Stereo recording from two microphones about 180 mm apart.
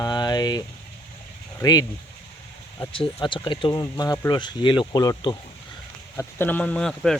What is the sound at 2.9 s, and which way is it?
Speech, 30° left (ahead or behind).